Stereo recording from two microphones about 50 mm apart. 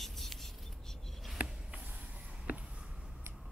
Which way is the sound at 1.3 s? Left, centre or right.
Right.